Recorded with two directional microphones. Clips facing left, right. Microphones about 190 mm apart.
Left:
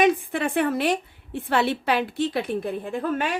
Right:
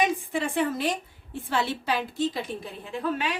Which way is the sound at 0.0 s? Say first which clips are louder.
Left 5 dB; 65° left (ahead or behind).